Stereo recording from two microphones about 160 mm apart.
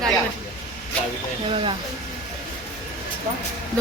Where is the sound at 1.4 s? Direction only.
35° right (ahead or behind).